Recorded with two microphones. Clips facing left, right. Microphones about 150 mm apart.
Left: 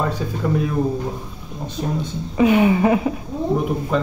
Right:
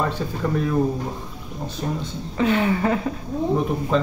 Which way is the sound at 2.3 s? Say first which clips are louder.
Left 5 dB; 15° left (ahead or behind).